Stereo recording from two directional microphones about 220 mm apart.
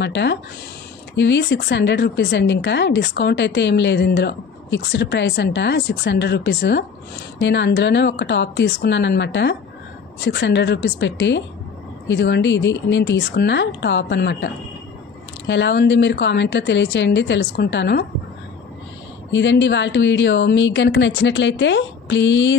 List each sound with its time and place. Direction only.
0.0 s speech: 50° left (ahead or behind)
19.3 s a woman's voice: 55° left (ahead or behind)